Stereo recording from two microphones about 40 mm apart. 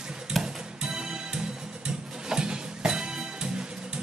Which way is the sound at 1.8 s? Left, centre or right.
Centre.